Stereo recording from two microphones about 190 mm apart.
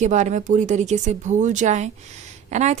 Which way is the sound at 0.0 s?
40° right (ahead or behind).